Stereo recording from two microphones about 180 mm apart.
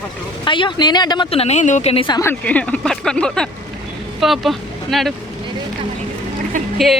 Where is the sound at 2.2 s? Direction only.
10° left (ahead or behind).